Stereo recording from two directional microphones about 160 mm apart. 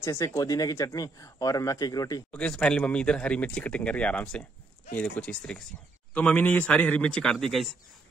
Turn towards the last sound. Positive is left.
turn(degrees=0)  # may be behind; listen again after turning